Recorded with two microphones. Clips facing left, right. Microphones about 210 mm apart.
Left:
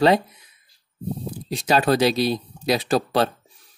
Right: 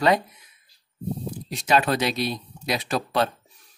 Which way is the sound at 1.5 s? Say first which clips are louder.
Left 3 dB; 35° left (ahead or behind).